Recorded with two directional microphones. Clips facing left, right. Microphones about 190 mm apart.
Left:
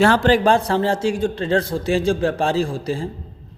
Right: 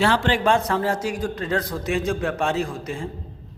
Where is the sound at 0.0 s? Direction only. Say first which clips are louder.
Left 5 dB; 45° left (ahead or behind).